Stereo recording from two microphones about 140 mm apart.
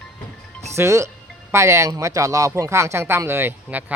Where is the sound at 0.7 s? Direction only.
20° right (ahead or behind).